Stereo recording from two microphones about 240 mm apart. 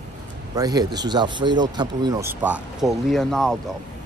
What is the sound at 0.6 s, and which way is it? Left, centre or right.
Speech, centre.